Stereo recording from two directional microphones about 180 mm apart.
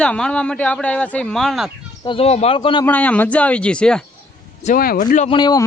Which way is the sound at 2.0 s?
30° left (ahead or behind).